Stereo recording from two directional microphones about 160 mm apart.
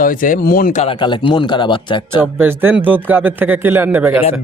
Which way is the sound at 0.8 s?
30° left (ahead or behind).